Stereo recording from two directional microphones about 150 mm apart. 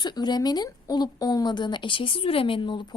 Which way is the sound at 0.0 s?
30° left (ahead or behind).